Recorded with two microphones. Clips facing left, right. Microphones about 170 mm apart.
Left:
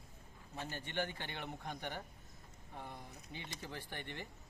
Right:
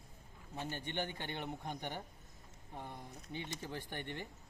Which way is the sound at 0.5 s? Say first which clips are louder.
Right 1 dB; 15° right (ahead or behind).